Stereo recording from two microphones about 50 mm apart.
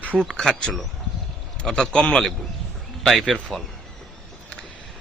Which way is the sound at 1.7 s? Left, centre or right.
Centre.